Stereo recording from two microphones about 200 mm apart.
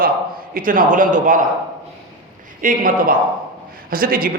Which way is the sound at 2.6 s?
45° right (ahead or behind).